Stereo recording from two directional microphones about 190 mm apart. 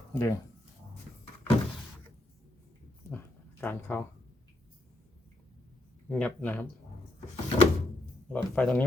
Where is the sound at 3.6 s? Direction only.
10° left (ahead or behind).